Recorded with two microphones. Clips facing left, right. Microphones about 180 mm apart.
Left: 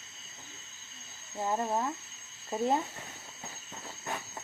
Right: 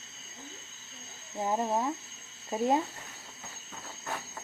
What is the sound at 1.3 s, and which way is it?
Speech, 15° right (ahead or behind).